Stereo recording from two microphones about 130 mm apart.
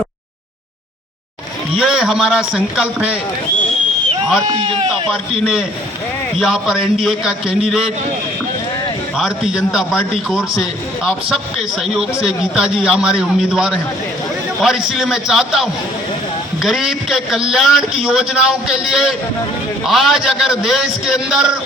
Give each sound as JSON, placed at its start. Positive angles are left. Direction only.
{"t": 1.7, "sound": "a man's voice", "side_deg": 0}
{"t": 4.4, "sound": "a man's voice", "side_deg": -40}
{"t": 6.4, "sound": "a man's voice", "side_deg": 0}
{"t": 9.1, "sound": "a man's voice", "side_deg": 0}
{"t": 12.2, "sound": "a man's voice", "side_deg": -5}